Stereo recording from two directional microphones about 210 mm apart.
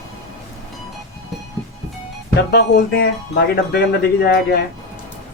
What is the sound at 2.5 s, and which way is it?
Speech, 50° left (ahead or behind).